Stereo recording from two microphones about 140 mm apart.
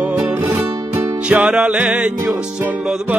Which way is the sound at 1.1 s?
10° right (ahead or behind).